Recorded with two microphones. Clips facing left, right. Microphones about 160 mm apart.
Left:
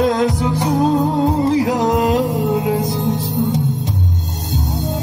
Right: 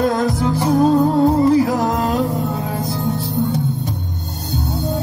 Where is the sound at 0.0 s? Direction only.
20° left (ahead or behind).